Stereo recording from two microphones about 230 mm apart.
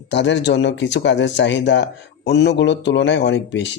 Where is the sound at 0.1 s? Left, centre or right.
Left.